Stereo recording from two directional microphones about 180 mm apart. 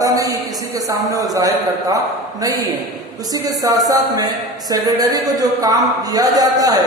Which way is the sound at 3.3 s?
20° right (ahead or behind).